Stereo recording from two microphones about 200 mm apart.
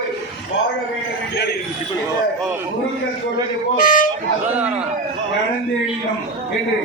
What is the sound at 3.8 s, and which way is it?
Speech, 45° left (ahead or behind).